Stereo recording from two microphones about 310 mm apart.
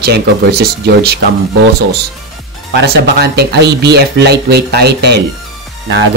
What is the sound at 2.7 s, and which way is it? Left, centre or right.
Speech, right.